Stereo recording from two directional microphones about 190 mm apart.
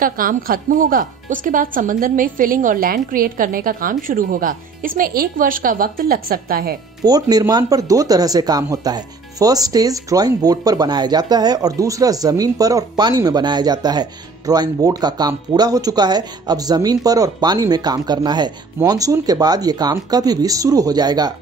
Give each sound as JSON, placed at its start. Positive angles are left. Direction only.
{"t": 0.0, "sound": "speech", "side_deg": -45}
{"t": 7.1, "sound": "speech", "side_deg": -20}